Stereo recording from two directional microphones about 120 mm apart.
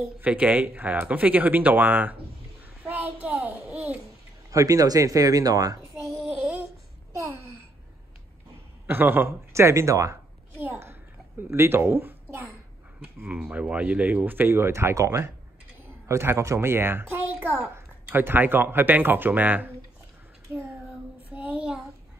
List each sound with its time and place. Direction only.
0.0 s a child's voice: 10° right (ahead or behind)
2.6 s child singing: 15° right (ahead or behind)
3.4 s a sound: 15° right (ahead or behind)
4.5 s speech: 30° right (ahead or behind)
8.8 s speech: 15° right (ahead or behind)
10.6 s a sound: 20° right (ahead or behind)
11.4 s a child's voice: 20° right (ahead or behind)
13.0 s a child's voice: 10° right (ahead or behind)
21.3 s child singing: 10° right (ahead or behind)